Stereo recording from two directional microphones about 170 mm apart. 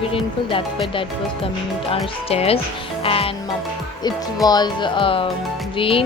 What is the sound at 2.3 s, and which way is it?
Speech, 35° left (ahead or behind).